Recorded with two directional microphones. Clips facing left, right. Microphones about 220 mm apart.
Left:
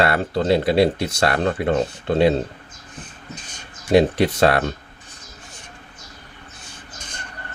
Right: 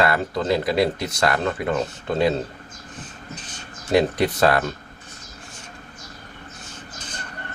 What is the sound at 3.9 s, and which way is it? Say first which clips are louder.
Speech: left 3 dB; 25° left (ahead or behind).